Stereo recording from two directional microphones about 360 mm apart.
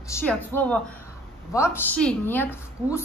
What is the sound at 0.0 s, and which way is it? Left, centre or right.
A woman's voice, centre.